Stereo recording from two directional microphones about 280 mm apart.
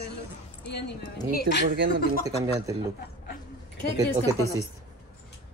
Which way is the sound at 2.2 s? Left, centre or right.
Centre.